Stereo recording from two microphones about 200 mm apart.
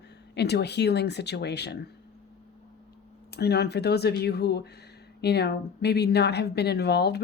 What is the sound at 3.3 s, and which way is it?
Speech, 55° left (ahead or behind).